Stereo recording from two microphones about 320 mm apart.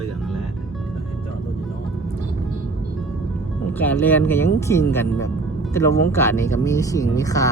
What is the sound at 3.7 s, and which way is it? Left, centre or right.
Speech, centre.